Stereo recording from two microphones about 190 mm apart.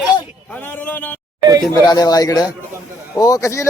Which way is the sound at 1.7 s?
20° left (ahead or behind).